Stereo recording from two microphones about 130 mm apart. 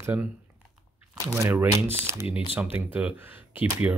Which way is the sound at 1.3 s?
15° right (ahead or behind).